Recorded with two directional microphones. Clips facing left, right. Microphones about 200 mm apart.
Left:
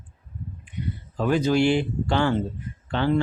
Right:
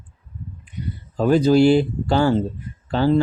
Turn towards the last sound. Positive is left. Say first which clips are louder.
# right 5 dB
turn(degrees=-35)  # may be behind; listen again after turning